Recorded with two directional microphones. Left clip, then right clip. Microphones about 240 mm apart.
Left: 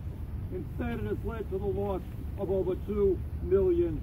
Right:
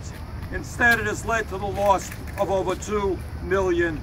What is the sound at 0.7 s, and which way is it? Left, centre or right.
Speech, right.